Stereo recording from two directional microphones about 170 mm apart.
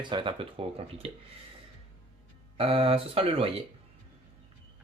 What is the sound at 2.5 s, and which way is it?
Speech, 35° right (ahead or behind).